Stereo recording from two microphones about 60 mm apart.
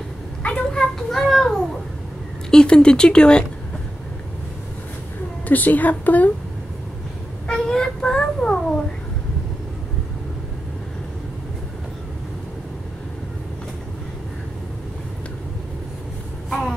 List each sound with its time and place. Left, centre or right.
0.7 s a sound: centre
2.5 s speech: centre
5.5 s a woman's voice: left
7.4 s child singing: centre
16.4 s vehicle: centre